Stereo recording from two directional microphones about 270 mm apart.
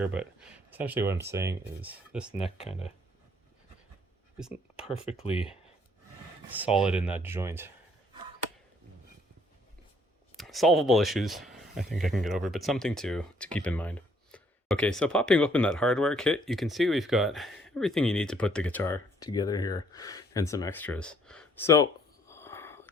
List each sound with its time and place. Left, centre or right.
0.0 s speech: centre
2.3 s speech: left
4.4 s speech: centre
4.9 s speech: left
6.5 s speech: centre
10.3 s speech: centre
22.3 s whispering: centre